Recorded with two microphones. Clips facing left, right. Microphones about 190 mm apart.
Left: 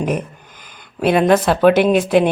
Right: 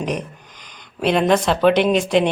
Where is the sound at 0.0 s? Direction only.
5° left (ahead or behind).